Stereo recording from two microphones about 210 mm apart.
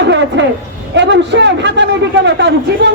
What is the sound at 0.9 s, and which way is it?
Speech, 55° right (ahead or behind).